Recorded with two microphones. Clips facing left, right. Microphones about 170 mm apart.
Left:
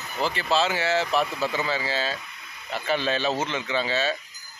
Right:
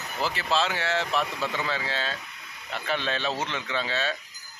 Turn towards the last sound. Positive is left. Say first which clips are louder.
# left 4 dB
turn(degrees=0)  # may be behind; listen again after turning